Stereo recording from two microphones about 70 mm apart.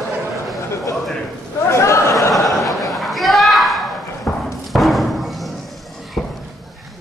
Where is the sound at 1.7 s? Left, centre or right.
Left.